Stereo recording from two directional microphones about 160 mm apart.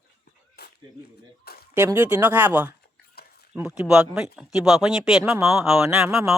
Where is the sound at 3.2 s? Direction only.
80° left.